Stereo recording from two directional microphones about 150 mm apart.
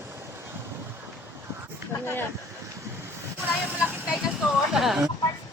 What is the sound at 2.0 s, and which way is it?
Speech, 15° left (ahead or behind).